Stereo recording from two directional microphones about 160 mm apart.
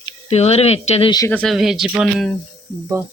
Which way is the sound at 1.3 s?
5° left (ahead or behind).